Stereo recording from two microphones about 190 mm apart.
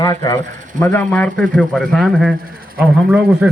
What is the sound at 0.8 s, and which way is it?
A man's voice, 10° left (ahead or behind).